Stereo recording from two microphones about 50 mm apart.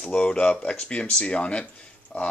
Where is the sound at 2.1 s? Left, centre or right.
Left.